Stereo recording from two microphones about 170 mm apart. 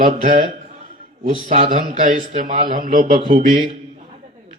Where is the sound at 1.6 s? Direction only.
50° right (ahead or behind).